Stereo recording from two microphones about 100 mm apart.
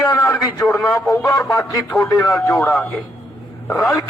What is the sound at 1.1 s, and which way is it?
A man's voice, 30° left (ahead or behind).